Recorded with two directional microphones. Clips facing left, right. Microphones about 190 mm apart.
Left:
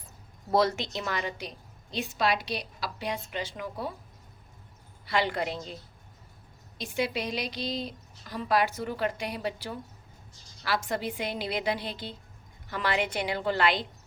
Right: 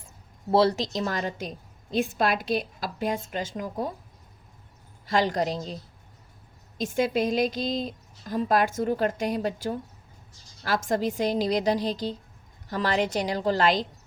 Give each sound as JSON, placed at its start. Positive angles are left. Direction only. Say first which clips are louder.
{"t": 0.5, "sound": "a woman's voice", "louder": "right 4 dB", "side_deg": -35}
{"t": 5.0, "sound": "a woman's voice", "louder": "right 4 dB", "side_deg": -40}
{"t": 6.7, "sound": "a woman's voice", "louder": "right 6 dB", "side_deg": -45}